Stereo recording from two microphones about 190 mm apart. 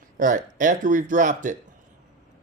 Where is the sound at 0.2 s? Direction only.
45° right (ahead or behind).